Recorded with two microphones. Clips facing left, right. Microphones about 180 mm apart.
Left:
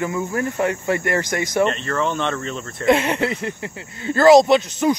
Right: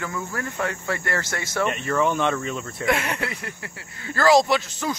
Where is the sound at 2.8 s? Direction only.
25° left (ahead or behind).